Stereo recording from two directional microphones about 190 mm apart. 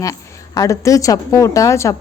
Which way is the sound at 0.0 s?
20° left (ahead or behind).